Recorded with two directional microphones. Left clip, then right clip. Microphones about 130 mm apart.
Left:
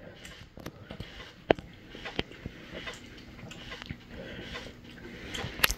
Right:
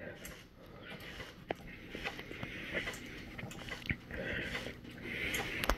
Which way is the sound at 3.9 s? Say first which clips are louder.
Right 5 dB; 30° right (ahead or behind).